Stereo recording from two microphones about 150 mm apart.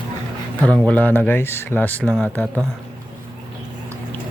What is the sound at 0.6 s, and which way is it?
Speech, 10° left (ahead or behind).